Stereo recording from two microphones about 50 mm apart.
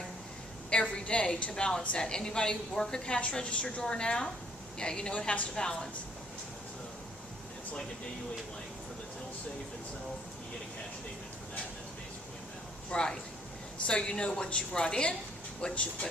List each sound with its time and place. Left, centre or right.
0.7 s a woman's voice: left
12.9 s a woman's voice: centre